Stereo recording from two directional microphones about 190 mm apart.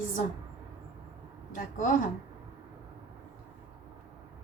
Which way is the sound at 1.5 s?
45° left (ahead or behind).